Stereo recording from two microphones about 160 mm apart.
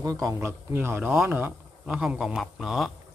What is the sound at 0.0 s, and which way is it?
A man's voice, 20° right (ahead or behind).